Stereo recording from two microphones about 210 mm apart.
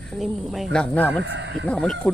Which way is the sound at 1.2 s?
55° right (ahead or behind).